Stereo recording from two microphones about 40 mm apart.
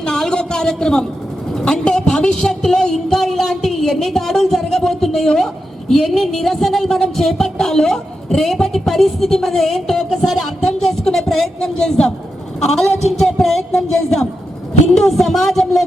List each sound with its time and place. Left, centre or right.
0.2 s a sound: centre
5.9 s a woman's voice: centre
12.5 s a woman's voice: centre